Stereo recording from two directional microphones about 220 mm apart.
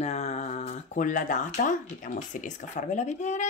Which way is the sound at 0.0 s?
30° left (ahead or behind).